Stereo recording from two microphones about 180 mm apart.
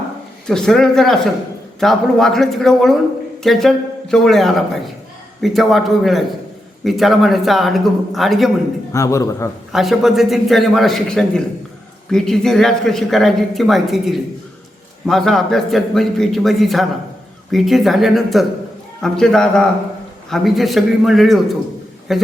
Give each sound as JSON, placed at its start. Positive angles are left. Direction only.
{"t": 0.4, "sound": "speech", "side_deg": 5}
{"t": 8.9, "sound": "a man's voice", "side_deg": 15}
{"t": 9.7, "sound": "speech", "side_deg": 0}